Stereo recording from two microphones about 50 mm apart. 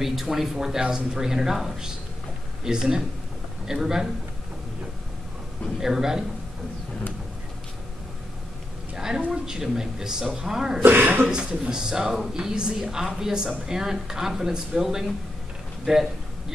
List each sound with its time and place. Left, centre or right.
0.0 s a woman's voice: centre
5.8 s a woman's voice: centre
8.9 s a sound: centre
9.3 s a woman's voice: centre
10.8 s speech: right
11.2 s a woman's voice: centre
15.8 s a sound: centre